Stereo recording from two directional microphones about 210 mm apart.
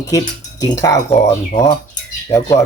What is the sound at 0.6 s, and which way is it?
Speech, 15° left (ahead or behind).